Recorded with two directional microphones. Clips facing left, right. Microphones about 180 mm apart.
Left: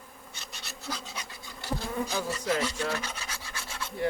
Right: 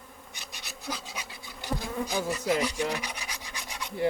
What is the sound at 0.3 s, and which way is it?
Bee, 15° right (ahead or behind).